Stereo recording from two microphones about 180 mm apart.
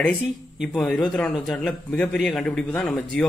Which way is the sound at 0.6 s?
5° left (ahead or behind).